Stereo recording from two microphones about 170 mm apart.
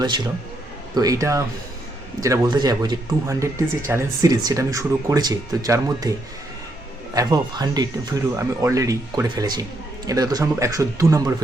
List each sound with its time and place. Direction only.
0.9 s speech: 20° right (ahead or behind)